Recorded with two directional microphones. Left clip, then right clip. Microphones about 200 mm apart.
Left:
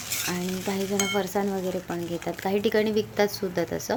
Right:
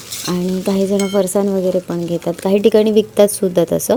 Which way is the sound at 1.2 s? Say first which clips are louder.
Right 12 dB; 45° right (ahead or behind).